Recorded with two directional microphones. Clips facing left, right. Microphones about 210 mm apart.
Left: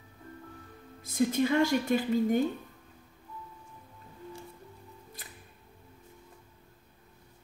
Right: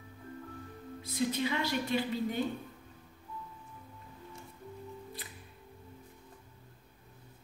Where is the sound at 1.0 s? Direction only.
45° left (ahead or behind).